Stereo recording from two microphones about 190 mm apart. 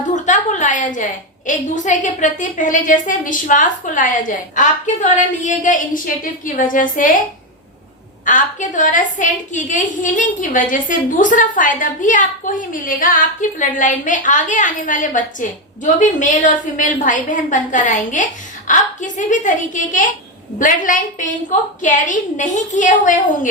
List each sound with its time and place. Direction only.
0.1 s a sound: 40° left (ahead or behind)
1.5 s a woman's voice: 40° left (ahead or behind)
8.2 s a woman's voice: 45° left (ahead or behind)